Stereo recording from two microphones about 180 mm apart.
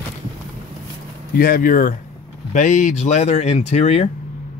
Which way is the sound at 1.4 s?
55° left (ahead or behind).